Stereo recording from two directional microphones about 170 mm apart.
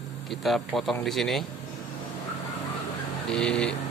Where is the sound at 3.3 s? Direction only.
5° left (ahead or behind).